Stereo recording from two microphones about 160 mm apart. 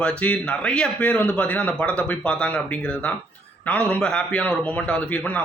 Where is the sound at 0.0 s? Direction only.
5° left (ahead or behind).